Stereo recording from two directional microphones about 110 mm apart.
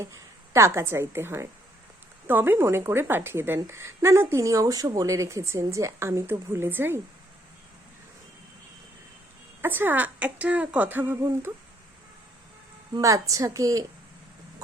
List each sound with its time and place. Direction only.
0.0 s a woman's voice: 25° right (ahead or behind)
9.6 s speech: 20° right (ahead or behind)
12.9 s a woman's voice: 30° right (ahead or behind)